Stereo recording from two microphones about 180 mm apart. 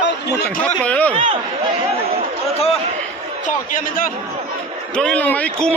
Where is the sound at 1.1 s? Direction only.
30° right (ahead or behind).